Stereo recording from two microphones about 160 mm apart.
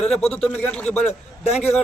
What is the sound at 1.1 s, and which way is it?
Speech, 40° left (ahead or behind).